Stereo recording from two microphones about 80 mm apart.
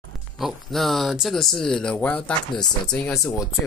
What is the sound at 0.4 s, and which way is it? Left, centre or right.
Speech, centre.